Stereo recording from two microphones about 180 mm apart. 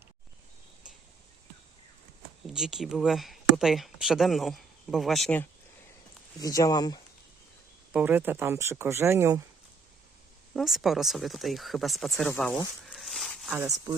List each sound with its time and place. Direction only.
2.5 s speech: 5° right (ahead or behind)
6.4 s speech: 20° left (ahead or behind)
7.9 s speech: 10° right (ahead or behind)
10.5 s speech: centre (ahead or behind)